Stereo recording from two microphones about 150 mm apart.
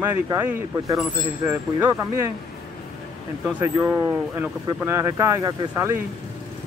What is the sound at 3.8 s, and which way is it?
Speech, 15° right (ahead or behind).